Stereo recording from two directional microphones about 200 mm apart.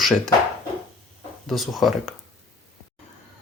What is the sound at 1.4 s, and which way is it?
Speech, centre (ahead or behind).